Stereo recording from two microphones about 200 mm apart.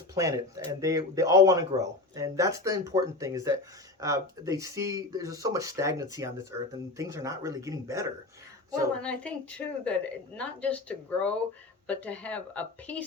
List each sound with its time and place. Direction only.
0.1 s speech: 15° right (ahead or behind)
8.9 s a woman's voice: 5° left (ahead or behind)